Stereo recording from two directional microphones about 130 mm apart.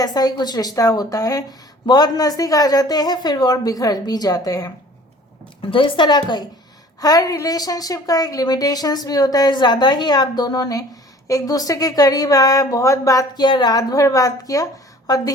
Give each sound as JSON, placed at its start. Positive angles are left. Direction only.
{"t": 0.0, "sound": "a woman's voice", "side_deg": 30}
{"t": 5.7, "sound": "a woman's voice", "side_deg": 40}